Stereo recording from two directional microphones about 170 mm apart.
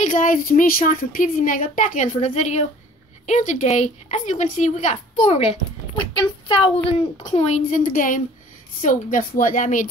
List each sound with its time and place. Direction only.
0.0 s a woman's voice: 50° left (ahead or behind); by 6.7 s 30° left (ahead or behind)
7.3 s a woman's voice: 45° left (ahead or behind)